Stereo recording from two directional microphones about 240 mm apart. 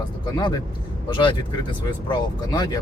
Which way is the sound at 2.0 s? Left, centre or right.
Centre.